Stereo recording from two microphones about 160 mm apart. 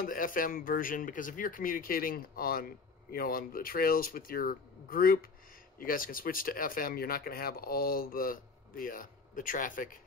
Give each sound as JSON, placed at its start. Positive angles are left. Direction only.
{"t": 0.0, "sound": "speech", "side_deg": 60}